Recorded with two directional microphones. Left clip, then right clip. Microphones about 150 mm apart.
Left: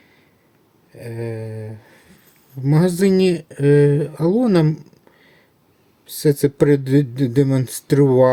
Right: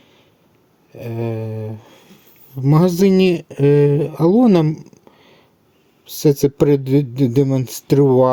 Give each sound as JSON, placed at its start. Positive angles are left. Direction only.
{"t": 0.9, "sound": "mantra", "side_deg": -40}
{"t": 2.6, "sound": "speech", "side_deg": -35}